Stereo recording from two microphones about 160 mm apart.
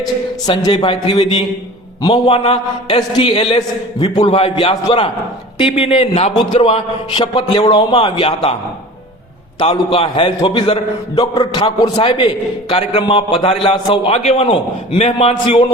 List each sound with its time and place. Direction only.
0.0 s a man's voice: 25° left (ahead or behind)
9.6 s a man's voice: 35° left (ahead or behind)